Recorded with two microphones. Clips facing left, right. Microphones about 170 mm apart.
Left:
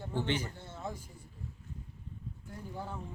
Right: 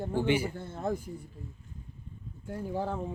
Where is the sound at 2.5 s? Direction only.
90° right.